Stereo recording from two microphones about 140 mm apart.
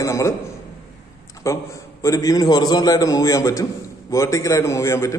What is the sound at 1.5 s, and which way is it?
A man's voice, 20° left (ahead or behind).